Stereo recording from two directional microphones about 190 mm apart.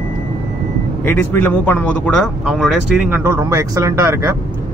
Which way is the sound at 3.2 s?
15° right (ahead or behind).